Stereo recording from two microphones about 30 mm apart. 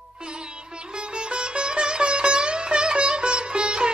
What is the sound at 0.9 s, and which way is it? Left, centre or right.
Sitar, right.